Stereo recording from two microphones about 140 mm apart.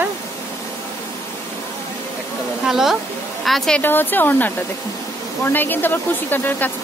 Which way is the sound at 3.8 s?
15° left (ahead or behind).